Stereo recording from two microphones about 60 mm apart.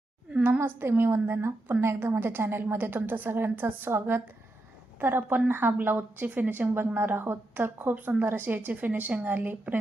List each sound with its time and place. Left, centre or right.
0.6 s a woman's voice: right